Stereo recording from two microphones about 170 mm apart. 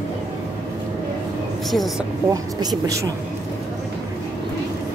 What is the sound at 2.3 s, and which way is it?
Speech, 20° right (ahead or behind).